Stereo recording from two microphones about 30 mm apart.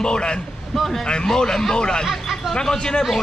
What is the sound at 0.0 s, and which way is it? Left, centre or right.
Speech, left.